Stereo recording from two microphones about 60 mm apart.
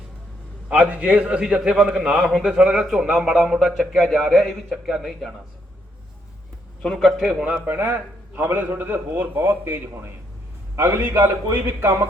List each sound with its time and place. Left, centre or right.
0.7 s a man's voice: right; by 2.4 s centre
2.4 s a man's voice: centre
3.5 s a man's voice: centre
6.8 s a man's voice: centre
7.7 s a man's voice: right